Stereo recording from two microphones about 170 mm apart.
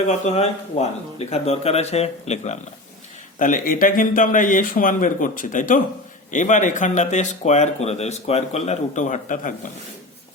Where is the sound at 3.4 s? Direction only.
50° left (ahead or behind).